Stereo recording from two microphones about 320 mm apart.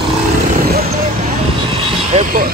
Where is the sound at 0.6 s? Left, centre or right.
Right.